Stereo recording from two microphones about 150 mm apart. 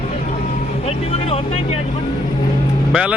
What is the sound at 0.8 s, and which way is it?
Speech, 40° left (ahead or behind).